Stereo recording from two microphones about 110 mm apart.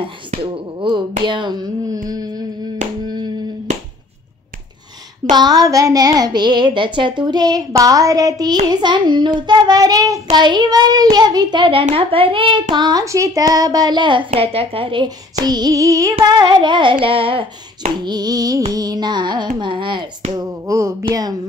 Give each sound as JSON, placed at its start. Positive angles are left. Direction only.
{"t": 0.0, "sound": "a sound", "side_deg": -45}
{"t": 5.3, "sound": "speech", "side_deg": -40}
{"t": 11.8, "sound": "a child's voice", "side_deg": -60}
{"t": 12.7, "sound": "speech", "side_deg": -35}
{"t": 14.3, "sound": "a child's voice", "side_deg": -60}
{"t": 15.4, "sound": "speech", "side_deg": -40}
{"t": 16.2, "sound": "carnatic music", "side_deg": -40}
{"t": 18.0, "sound": "speech", "side_deg": -40}
{"t": 18.7, "sound": "carnatic music", "side_deg": -35}
{"t": 20.3, "sound": "a sound", "side_deg": -30}
{"t": 21.1, "sound": "speech", "side_deg": -35}